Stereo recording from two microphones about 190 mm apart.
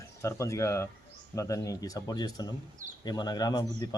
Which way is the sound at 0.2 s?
15° left (ahead or behind).